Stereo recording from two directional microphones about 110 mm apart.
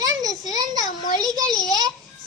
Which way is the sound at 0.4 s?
35° right (ahead or behind).